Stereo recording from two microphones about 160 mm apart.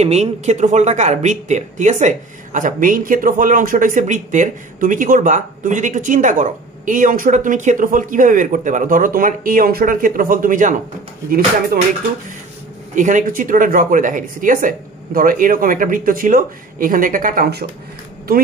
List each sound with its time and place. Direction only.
0.0 s speech: 45° right (ahead or behind)
11.2 s speech: 70° right (ahead or behind)
12.9 s speech: 55° right (ahead or behind); by 17.6 s 70° right (ahead or behind)